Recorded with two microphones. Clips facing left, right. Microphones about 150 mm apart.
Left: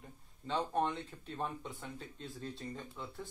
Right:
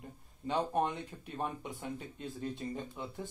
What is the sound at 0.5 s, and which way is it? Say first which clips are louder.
Speech: right 2 dB; 15° right (ahead or behind).